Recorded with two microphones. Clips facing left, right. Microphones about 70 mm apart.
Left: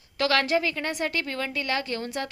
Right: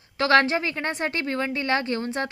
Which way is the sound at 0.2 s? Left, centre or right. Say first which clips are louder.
Right 4 dB; right.